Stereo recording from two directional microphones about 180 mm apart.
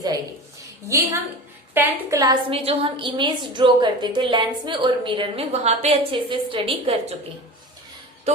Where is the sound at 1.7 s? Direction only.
15° right (ahead or behind).